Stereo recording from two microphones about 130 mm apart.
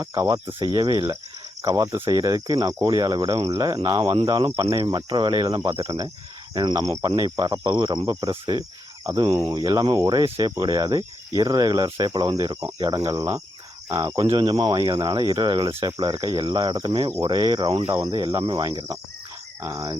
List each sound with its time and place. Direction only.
0.0 s speech: 25° right (ahead or behind)